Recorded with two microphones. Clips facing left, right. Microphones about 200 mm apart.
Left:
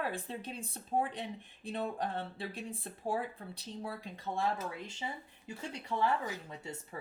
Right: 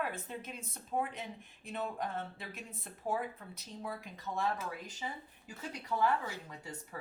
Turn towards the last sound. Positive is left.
turn(degrees=20)  # may be behind; listen again after turning